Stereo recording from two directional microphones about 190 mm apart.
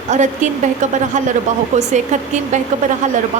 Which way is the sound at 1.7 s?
40° right (ahead or behind).